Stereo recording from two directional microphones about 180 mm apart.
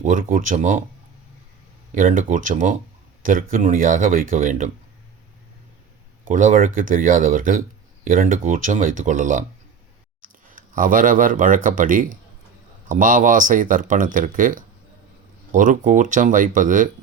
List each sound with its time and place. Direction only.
0.0 s speech: 45° right (ahead or behind)
2.0 s speech: 45° right (ahead or behind)
6.2 s speech: 45° right (ahead or behind)
10.5 s speech: 50° right (ahead or behind)